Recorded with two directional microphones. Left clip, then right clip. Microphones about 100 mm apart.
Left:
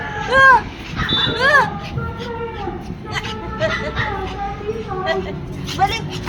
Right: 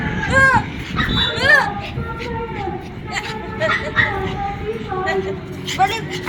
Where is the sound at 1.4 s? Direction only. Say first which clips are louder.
Right 1 dB; 65° left (ahead or behind).